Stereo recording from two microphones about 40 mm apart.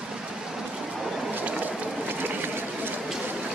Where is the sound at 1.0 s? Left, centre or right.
Centre.